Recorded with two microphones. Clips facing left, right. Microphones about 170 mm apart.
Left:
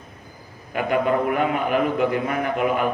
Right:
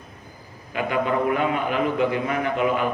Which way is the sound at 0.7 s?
50° left (ahead or behind).